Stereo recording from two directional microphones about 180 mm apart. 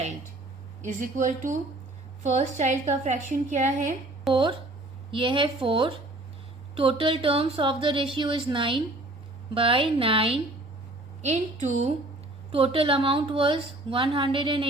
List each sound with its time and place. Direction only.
0.8 s a woman's voice: 40° right (ahead or behind)
4.3 s a woman's voice: 30° right (ahead or behind)